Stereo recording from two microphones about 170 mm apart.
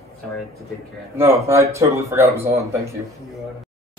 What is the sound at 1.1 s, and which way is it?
Speech, 15° right (ahead or behind).